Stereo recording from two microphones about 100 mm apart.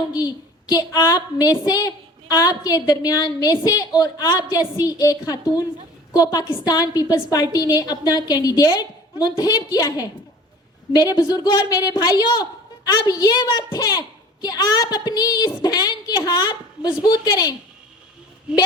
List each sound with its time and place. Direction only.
0.1 s a woman's voice: 40° left (ahead or behind)
18.5 s a woman's voice: 10° right (ahead or behind)